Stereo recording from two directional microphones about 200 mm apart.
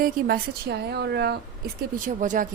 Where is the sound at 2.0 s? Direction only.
40° right (ahead or behind).